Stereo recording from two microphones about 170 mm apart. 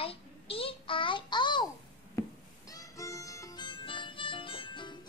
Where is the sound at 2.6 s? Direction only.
20° left (ahead or behind).